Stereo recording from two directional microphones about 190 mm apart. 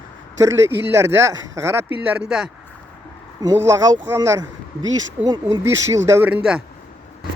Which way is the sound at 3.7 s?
15° right (ahead or behind).